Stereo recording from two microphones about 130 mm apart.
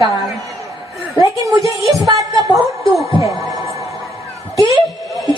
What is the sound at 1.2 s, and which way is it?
A woman's voice, 25° right (ahead or behind).